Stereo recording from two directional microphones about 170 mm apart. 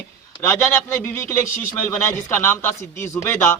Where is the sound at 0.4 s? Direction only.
15° left (ahead or behind).